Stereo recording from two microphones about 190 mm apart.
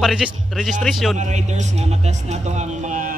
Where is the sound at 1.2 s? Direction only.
40° right (ahead or behind).